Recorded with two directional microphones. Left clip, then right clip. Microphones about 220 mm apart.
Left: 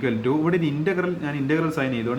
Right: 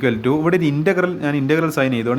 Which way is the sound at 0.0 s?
50° right (ahead or behind).